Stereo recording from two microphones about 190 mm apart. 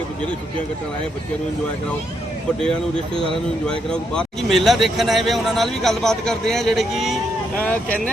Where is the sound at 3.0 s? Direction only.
30° right (ahead or behind).